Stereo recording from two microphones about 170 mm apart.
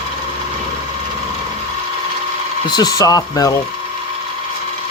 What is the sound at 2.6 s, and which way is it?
Speech, 25° left (ahead or behind).